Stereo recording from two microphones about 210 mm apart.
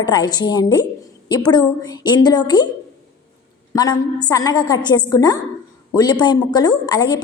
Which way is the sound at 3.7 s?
20° left (ahead or behind).